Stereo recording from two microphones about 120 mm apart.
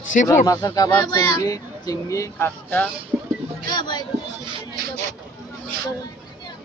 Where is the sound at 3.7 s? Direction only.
40° left (ahead or behind).